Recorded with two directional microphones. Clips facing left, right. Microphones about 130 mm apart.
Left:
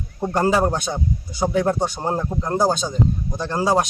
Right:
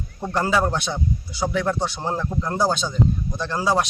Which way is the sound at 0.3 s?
40° left (ahead or behind).